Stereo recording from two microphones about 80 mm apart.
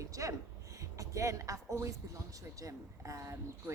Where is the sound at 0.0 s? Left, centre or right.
Right.